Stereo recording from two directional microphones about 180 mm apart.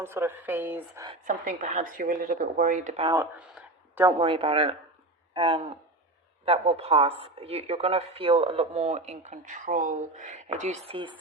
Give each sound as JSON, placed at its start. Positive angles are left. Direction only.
{"t": 0.0, "sound": "speech", "side_deg": -15}
{"t": 1.2, "sound": "speech", "side_deg": -45}
{"t": 3.3, "sound": "a sound", "side_deg": -5}
{"t": 4.2, "sound": "a woman's voice", "side_deg": -30}
{"t": 10.8, "sound": "speech", "side_deg": -25}